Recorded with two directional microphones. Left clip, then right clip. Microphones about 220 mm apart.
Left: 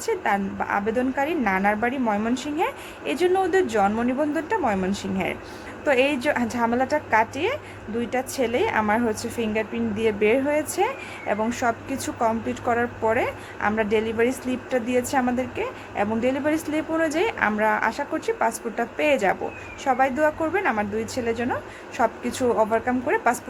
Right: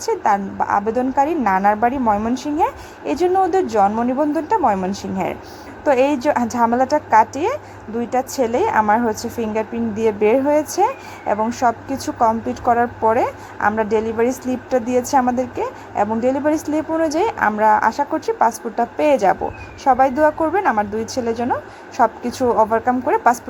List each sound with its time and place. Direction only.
0.0 s a woman's voice: 15° right (ahead or behind)